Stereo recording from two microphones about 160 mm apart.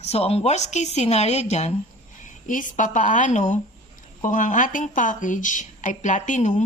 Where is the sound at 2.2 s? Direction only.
55° left (ahead or behind).